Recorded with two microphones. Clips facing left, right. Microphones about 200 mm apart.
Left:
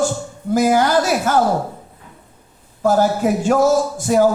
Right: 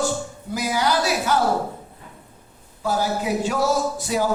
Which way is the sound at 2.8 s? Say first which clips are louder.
Left 8 dB; 50° left (ahead or behind).